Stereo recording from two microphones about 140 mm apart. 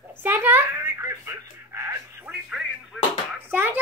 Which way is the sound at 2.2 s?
10° right (ahead or behind).